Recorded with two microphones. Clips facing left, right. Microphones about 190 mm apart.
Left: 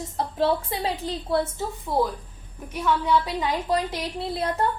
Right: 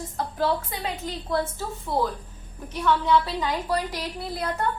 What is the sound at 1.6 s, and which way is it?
A woman's voice, 15° left (ahead or behind).